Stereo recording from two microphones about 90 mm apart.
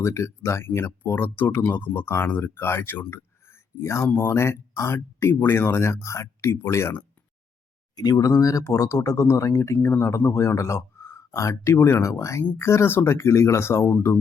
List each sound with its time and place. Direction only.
0.0 s speech: 30° left (ahead or behind)
8.2 s speech: 40° left (ahead or behind)